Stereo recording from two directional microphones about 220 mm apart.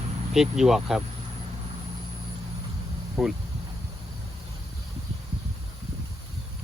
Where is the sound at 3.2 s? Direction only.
Centre (ahead or behind).